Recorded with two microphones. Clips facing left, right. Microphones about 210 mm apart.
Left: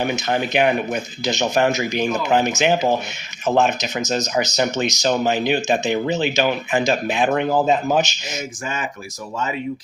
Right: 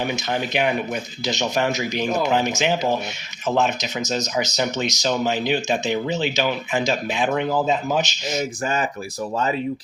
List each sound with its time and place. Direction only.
0.0 s speech: 50° left (ahead or behind)
8.6 s speech: 35° right (ahead or behind)